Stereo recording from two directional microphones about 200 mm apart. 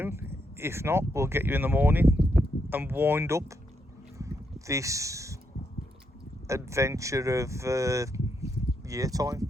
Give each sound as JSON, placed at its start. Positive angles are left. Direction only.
{"t": 0.0, "sound": "speech", "side_deg": -10}
{"t": 4.2, "sound": "a sound", "side_deg": -15}
{"t": 6.5, "sound": "speech", "side_deg": -15}